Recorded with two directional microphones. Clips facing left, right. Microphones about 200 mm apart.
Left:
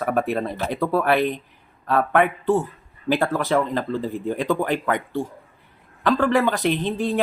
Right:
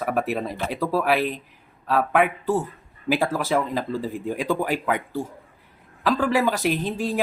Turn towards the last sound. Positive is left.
turn(degrees=-5)  # may be behind; listen again after turning